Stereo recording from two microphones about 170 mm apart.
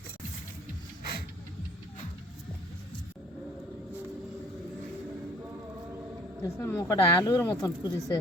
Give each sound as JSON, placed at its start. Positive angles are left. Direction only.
{"t": 6.4, "sound": "speech", "side_deg": 15}